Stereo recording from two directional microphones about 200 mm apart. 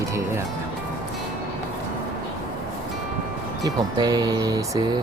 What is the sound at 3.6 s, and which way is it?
Speech, 20° right (ahead or behind).